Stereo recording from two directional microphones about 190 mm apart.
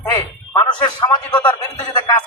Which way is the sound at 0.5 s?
25° left (ahead or behind).